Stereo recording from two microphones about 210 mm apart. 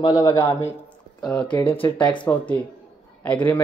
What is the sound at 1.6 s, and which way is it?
Speech, 25° left (ahead or behind).